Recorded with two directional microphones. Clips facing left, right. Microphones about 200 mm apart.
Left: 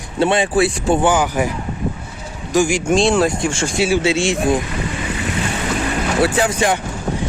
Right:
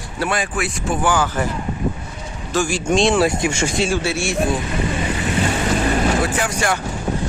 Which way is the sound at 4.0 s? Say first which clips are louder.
Left 5 dB; 20° left (ahead or behind).